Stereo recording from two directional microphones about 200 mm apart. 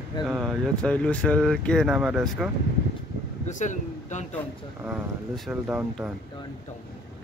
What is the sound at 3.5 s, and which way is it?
Speech, 40° left (ahead or behind).